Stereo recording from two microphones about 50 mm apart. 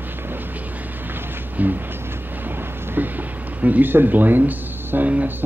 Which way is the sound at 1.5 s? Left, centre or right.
Right.